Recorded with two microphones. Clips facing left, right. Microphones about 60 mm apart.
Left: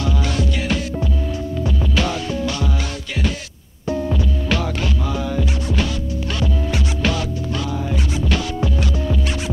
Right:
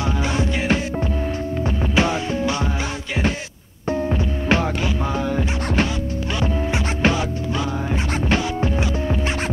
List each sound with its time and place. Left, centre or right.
0.0 s music: right
3.9 s music: right
8.3 s music: right